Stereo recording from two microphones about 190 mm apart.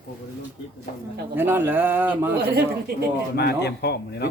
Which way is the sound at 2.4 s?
55° right (ahead or behind).